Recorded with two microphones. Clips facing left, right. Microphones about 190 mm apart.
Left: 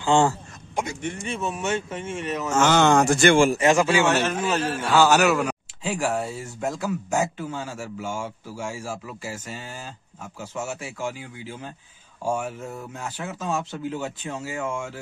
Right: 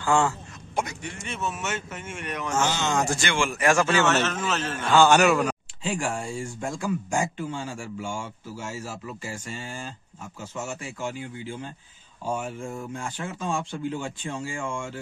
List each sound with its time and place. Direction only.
0.0 s a man's voice: 30° left (ahead or behind)
2.5 s speech: 75° left (ahead or behind); by 3.5 s 45° left (ahead or behind)
3.5 s a man's voice: 20° left (ahead or behind); by 9.7 s 5° left (ahead or behind)
10.7 s a man's voice: 10° left (ahead or behind)